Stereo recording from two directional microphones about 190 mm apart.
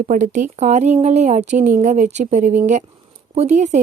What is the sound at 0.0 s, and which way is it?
Speech, 40° right (ahead or behind).